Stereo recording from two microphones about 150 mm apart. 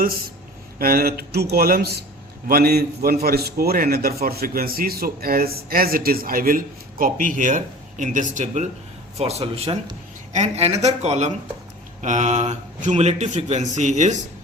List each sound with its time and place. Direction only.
0.8 s a man's voice: 80° right
7.0 s speech: 60° right (ahead or behind)
9.1 s speech: 45° right (ahead or behind)